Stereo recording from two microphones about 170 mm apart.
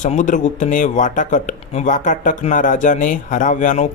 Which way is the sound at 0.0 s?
45° left (ahead or behind).